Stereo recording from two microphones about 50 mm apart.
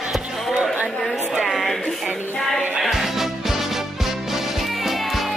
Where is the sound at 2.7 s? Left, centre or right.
Centre.